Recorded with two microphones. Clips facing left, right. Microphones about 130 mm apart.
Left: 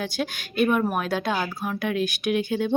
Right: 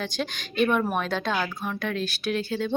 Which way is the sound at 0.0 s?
10° left (ahead or behind).